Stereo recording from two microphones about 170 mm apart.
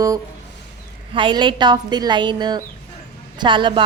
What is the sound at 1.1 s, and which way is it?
A woman's voice, 30° right (ahead or behind).